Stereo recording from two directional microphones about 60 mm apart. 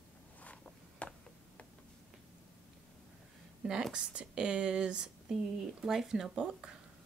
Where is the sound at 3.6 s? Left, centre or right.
Centre.